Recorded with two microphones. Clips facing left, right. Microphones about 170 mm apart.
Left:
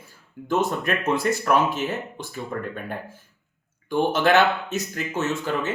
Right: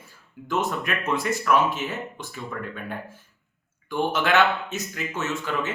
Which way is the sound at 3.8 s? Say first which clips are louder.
Left 4 dB; 35° left (ahead or behind).